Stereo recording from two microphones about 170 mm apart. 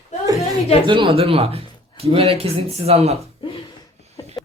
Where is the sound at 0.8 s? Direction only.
30° right (ahead or behind).